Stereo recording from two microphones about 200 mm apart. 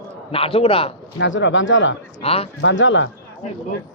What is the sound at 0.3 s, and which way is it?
Speech, 30° left (ahead or behind).